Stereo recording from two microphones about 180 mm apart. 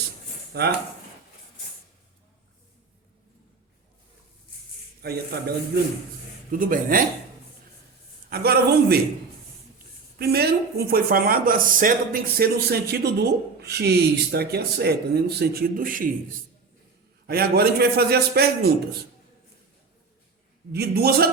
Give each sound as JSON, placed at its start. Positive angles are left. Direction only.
{"t": 0.5, "sound": "speech", "side_deg": -65}
{"t": 5.0, "sound": "speech", "side_deg": -60}
{"t": 6.5, "sound": "speech", "side_deg": -50}
{"t": 8.3, "sound": "speech", "side_deg": -60}
{"t": 10.2, "sound": "speech", "side_deg": -60}
{"t": 17.2, "sound": "speech", "side_deg": -60}
{"t": 20.7, "sound": "speech", "side_deg": -60}